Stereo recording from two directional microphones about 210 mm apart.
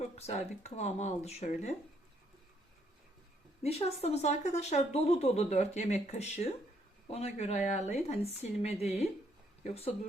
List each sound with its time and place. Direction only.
0.0 s speech: 30° left (ahead or behind)
3.6 s speech: 30° left (ahead or behind)